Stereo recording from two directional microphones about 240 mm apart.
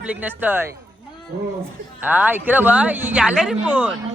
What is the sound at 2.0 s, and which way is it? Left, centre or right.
A man's voice, centre.